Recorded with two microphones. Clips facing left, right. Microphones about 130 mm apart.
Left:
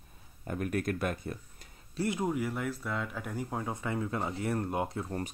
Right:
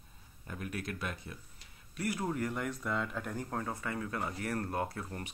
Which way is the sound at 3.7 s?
20° left (ahead or behind).